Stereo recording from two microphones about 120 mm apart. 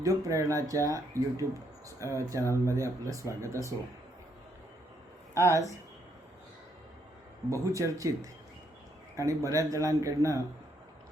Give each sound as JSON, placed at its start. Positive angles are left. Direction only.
{"t": 0.0, "sound": "speech", "side_deg": -25}
{"t": 5.4, "sound": "speech", "side_deg": -25}
{"t": 7.5, "sound": "speech", "side_deg": -25}